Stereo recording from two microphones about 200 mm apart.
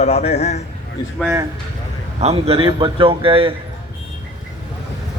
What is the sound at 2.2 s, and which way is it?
A man's voice, 30° right (ahead or behind).